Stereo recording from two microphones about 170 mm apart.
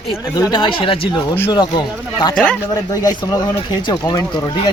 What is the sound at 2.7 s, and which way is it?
Speech, 20° left (ahead or behind).